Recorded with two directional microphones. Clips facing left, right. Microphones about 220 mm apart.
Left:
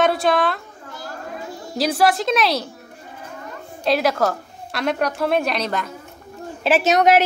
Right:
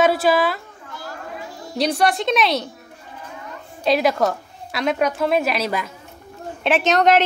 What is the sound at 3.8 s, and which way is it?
A woman's voice, centre (ahead or behind).